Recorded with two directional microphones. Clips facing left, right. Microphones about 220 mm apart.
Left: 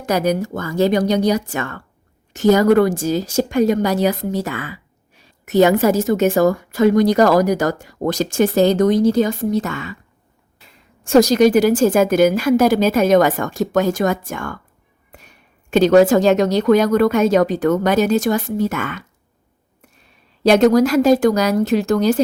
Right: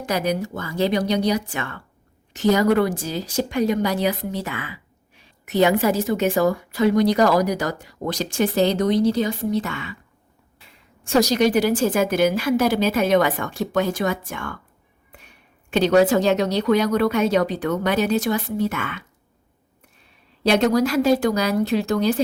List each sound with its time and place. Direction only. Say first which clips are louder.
0.0 s a woman's voice: left 5 dB; 45° left (ahead or behind)
11.0 s a woman's voice: left 6 dB; 45° left (ahead or behind)
15.7 s a woman's voice: left 5 dB; 45° left (ahead or behind)
20.4 s a woman's voice: left 6 dB; 45° left (ahead or behind)